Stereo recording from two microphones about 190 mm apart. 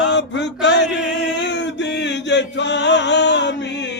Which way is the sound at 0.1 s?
65° left (ahead or behind).